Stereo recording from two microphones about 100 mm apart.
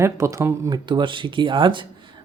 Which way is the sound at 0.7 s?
50° right (ahead or behind).